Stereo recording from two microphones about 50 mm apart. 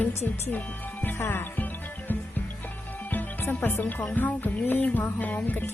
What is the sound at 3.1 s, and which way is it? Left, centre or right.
Speech, left.